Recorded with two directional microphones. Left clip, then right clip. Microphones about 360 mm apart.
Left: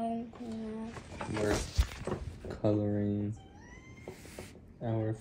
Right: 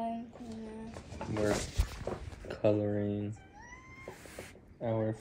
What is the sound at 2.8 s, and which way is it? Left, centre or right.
Speech, left.